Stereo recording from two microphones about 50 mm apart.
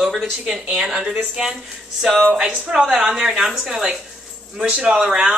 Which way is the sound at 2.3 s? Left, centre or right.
Centre.